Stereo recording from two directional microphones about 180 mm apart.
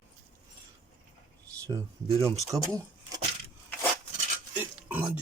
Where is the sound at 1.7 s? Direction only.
20° right (ahead or behind).